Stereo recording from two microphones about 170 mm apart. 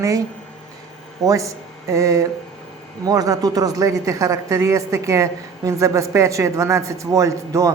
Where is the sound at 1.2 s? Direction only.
20° right (ahead or behind).